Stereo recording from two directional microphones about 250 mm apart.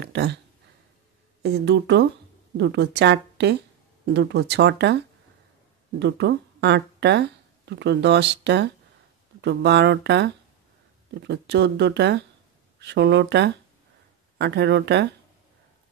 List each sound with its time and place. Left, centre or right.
0.0 s speech: right
1.4 s speech: right
5.9 s speech: right